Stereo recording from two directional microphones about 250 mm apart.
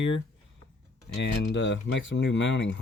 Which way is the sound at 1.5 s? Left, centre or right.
Left.